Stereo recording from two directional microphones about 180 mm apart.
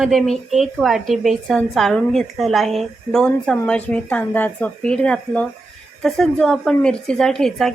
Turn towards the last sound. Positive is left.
turn(degrees=0)  # may be behind; listen again after turning